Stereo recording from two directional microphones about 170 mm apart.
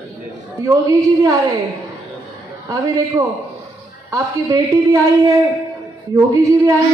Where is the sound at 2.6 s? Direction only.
20° right (ahead or behind).